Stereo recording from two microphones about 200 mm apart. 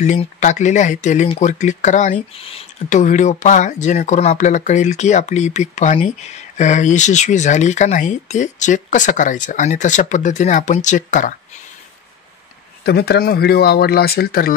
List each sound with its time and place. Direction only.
0.0 s speech: 35° left (ahead or behind)
12.8 s speech: 50° left (ahead or behind)